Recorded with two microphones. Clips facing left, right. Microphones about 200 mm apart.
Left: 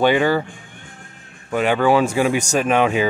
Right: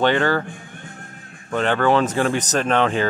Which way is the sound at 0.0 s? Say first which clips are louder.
Left 2 dB; 10° left (ahead or behind).